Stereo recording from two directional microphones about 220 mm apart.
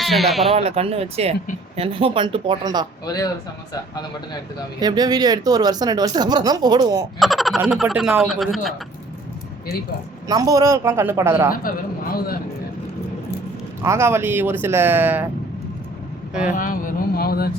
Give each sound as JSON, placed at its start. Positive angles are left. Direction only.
{"t": 0.0, "sound": "speech", "side_deg": 0}
{"t": 0.5, "sound": "speech", "side_deg": -25}
{"t": 4.8, "sound": "speech", "side_deg": -20}
{"t": 7.2, "sound": "speech", "side_deg": 0}
{"t": 10.2, "sound": "speech", "side_deg": -15}
{"t": 12.1, "sound": "a man's voice", "side_deg": 45}
{"t": 13.8, "sound": "speech", "side_deg": -10}
{"t": 16.5, "sound": "speech", "side_deg": 40}